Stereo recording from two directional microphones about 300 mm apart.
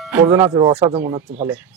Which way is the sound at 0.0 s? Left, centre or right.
Centre.